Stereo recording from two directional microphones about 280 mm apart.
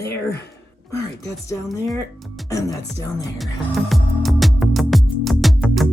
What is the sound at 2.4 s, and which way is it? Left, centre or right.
Speech, centre.